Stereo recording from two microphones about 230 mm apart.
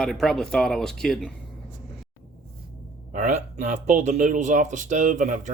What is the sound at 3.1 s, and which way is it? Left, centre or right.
Speech, right.